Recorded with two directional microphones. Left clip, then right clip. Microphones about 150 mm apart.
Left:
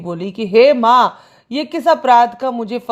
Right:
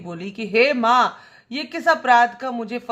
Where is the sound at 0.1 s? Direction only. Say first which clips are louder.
Left 8 dB; 35° left (ahead or behind).